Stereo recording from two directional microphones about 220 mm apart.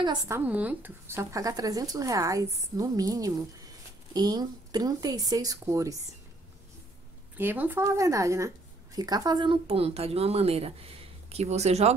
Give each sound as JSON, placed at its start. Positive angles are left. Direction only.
{"t": 0.0, "sound": "a woman's voice", "side_deg": -20}
{"t": 0.5, "sound": "speech", "side_deg": -5}
{"t": 7.3, "sound": "a woman's voice", "side_deg": -10}